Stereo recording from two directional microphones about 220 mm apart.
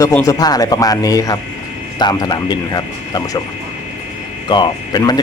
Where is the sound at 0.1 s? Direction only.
15° left (ahead or behind).